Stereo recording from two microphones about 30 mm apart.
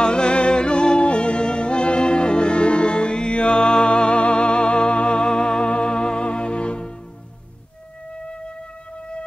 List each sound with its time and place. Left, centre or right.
0.0 s music: left